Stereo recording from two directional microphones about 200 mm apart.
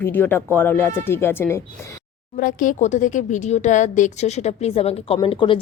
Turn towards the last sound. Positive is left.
turn(degrees=25)  # may be behind; listen again after turning